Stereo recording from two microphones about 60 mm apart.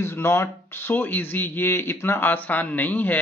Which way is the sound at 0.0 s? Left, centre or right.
Left.